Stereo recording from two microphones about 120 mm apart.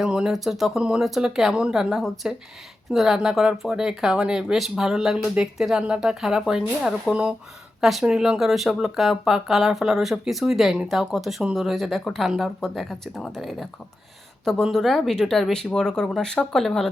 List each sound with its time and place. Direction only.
0.0 s speech: 5° right (ahead or behind)